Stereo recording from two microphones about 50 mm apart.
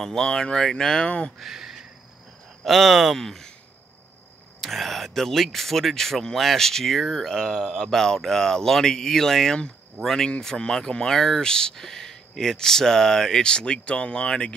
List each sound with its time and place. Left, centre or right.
0.0 s speech: centre
1.0 s speech: left
1.4 s speech: centre
4.6 s speech: centre
7.5 s speech: centre
7.8 s speech: centre